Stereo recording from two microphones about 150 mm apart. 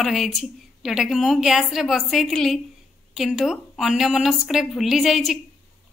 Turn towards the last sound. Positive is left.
turn(degrees=0)  # may be behind; listen again after turning